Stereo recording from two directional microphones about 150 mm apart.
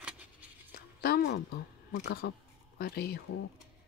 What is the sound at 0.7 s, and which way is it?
Speech, 90° left.